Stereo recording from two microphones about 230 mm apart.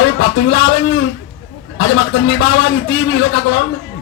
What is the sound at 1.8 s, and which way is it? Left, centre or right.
A man's voice, left.